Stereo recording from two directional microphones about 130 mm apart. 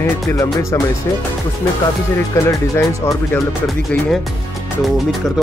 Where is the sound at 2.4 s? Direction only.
20° left (ahead or behind).